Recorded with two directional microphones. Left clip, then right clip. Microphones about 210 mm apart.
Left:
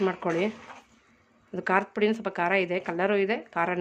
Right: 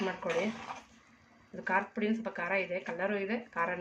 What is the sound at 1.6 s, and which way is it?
Speech, 55° left (ahead or behind).